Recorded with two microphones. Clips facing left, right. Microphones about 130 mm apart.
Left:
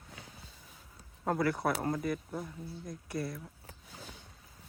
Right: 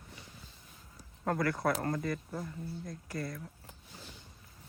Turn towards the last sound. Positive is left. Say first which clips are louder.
# left 2 dB
turn(degrees=5)  # may be behind; listen again after turning